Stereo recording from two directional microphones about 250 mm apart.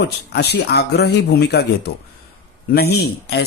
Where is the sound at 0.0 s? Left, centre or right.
Left.